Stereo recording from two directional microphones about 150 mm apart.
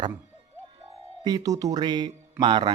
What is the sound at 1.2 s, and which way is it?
Speech, 25° right (ahead or behind).